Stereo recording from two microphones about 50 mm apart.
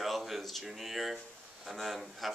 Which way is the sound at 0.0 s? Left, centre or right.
Centre.